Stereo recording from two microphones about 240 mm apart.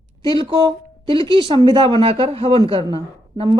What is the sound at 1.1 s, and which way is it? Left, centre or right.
Speech, right.